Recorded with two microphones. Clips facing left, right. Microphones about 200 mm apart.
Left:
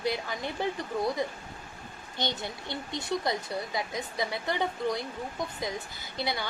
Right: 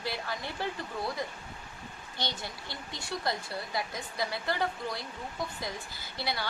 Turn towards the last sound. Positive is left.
turn(degrees=20)  # may be behind; listen again after turning